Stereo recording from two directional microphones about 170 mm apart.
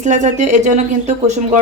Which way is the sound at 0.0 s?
45° right (ahead or behind).